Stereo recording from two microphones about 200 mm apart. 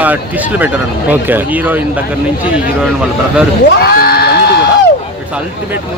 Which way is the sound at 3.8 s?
50° left (ahead or behind).